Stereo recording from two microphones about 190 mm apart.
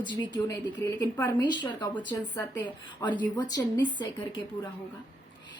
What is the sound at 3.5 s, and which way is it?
Speech, 25° left (ahead or behind).